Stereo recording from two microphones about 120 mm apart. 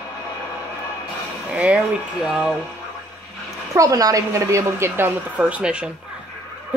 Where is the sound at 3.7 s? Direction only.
30° right (ahead or behind).